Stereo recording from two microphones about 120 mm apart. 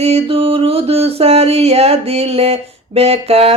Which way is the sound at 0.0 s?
55° right (ahead or behind).